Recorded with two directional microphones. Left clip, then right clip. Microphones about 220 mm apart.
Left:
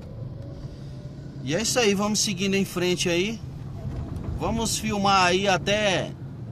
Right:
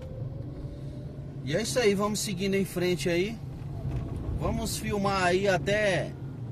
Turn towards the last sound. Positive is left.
turn(degrees=10)  # may be behind; listen again after turning